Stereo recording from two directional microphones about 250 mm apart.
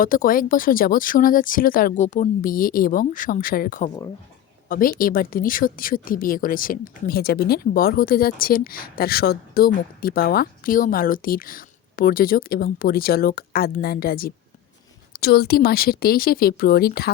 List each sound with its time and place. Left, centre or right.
0.0 s speech: left